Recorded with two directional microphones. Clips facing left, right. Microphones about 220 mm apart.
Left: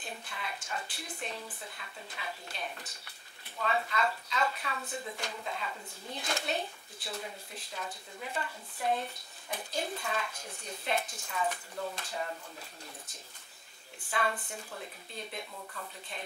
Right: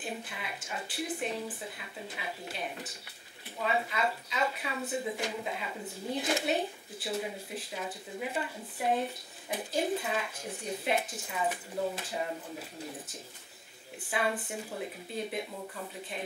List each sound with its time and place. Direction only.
0.0 s a woman's voice: 5° right (ahead or behind)
15.5 s a woman's voice: 20° right (ahead or behind)